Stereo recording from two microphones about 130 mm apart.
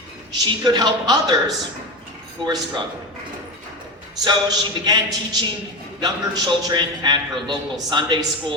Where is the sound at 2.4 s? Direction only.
35° right (ahead or behind).